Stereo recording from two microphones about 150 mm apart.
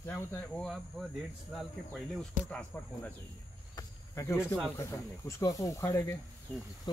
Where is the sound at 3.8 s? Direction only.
20° left (ahead or behind).